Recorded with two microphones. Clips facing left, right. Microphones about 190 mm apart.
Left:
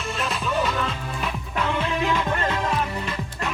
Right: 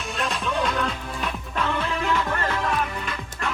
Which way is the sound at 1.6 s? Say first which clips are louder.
Left 2 dB; 20° left (ahead or behind).